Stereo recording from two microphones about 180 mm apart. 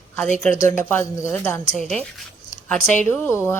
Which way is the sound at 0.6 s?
10° left (ahead or behind).